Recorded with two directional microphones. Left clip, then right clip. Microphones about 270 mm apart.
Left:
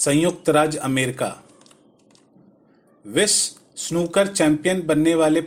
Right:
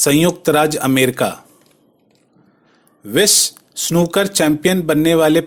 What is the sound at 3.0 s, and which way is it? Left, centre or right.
Speech, right.